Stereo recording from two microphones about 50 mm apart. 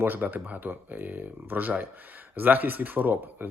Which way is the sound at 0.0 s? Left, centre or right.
Right.